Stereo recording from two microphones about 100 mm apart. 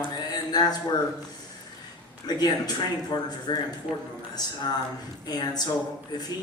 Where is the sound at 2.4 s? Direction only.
40° left (ahead or behind).